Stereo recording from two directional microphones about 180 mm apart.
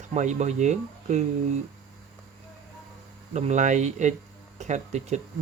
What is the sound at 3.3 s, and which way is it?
Speech, 40° right (ahead or behind).